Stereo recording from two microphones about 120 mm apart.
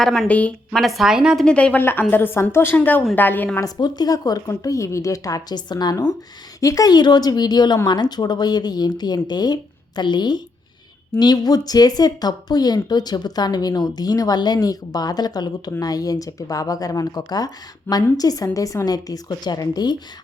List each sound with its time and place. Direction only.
0.0 s a woman's voice: centre (ahead or behind)
0.3 s a woman's voice: 10° left (ahead or behind); by 1.5 s 5° right (ahead or behind)
1.5 s a woman's voice: 10° left (ahead or behind)
3.6 s speech: 35° left (ahead or behind)